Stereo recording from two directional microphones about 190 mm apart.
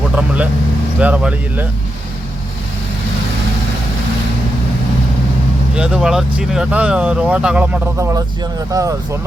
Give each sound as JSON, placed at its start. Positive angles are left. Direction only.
{"t": 0.9, "sound": "speech", "side_deg": -5}
{"t": 5.7, "sound": "speech", "side_deg": -5}